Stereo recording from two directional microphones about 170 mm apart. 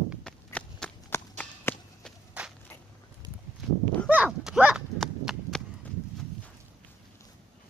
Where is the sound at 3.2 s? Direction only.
25° right (ahead or behind).